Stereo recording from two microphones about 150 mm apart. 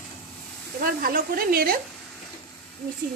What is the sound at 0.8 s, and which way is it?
Sizzle, 75° right (ahead or behind).